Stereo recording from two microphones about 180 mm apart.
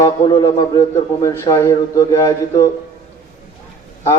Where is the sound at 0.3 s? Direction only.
25° left (ahead or behind).